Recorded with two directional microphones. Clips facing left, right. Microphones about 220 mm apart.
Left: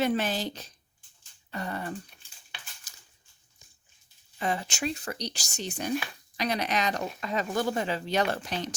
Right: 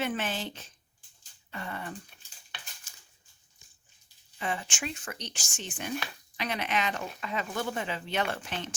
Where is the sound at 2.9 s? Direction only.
40° left (ahead or behind).